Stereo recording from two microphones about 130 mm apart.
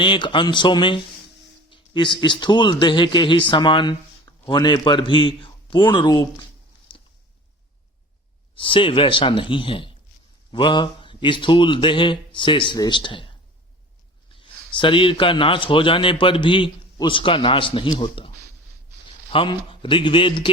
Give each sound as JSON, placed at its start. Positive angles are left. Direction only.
{"t": 0.0, "sound": "speech", "side_deg": 40}
{"t": 6.9, "sound": "a sound", "side_deg": 40}
{"t": 8.5, "sound": "speech", "side_deg": 40}
{"t": 14.3, "sound": "speech", "side_deg": 40}
{"t": 19.3, "sound": "speech", "side_deg": 40}